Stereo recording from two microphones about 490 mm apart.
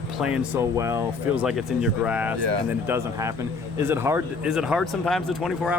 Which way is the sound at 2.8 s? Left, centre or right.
Centre.